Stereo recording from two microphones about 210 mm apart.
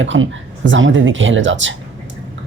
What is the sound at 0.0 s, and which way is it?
Speech, 65° right (ahead or behind).